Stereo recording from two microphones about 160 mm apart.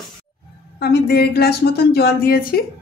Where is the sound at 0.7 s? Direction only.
80° left.